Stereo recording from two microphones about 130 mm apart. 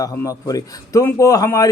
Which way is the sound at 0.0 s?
30° left (ahead or behind).